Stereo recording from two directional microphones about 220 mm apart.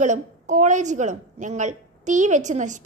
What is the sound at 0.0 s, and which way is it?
A woman's voice, 35° right (ahead or behind).